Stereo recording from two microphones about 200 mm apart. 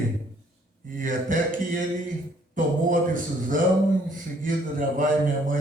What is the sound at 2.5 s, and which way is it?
Speech, 40° right (ahead or behind).